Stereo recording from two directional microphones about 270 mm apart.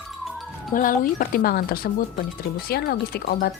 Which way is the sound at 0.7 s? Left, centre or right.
Left.